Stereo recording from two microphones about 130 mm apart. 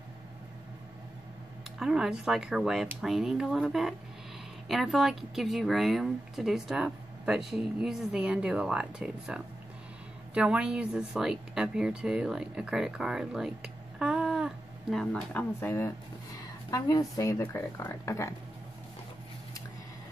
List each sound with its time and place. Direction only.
1.8 s a woman's voice: 5° right (ahead or behind)
15.6 s speech: 20° left (ahead or behind)